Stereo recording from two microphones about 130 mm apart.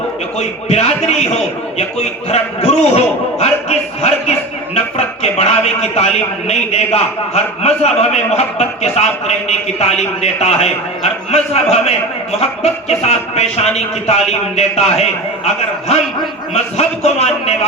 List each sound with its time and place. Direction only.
0.3 s a man's voice: 55° left (ahead or behind)
16.7 s a man's voice: 55° left (ahead or behind)